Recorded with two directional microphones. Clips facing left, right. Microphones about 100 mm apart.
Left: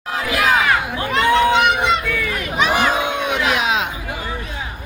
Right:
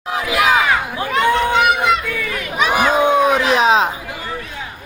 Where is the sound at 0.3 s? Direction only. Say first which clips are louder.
Right 2 dB; 10° right (ahead or behind).